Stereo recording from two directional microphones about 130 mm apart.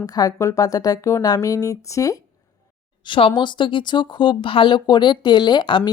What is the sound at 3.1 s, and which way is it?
A woman's voice, 40° left (ahead or behind).